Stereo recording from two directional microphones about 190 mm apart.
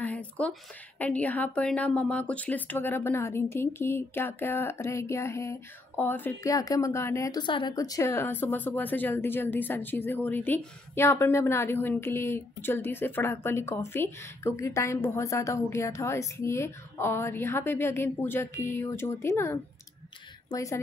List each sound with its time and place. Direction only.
0.0 s a woman's voice: 5° left (ahead or behind)